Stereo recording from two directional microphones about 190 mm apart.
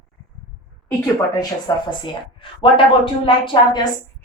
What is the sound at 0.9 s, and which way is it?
A woman's voice, 15° left (ahead or behind).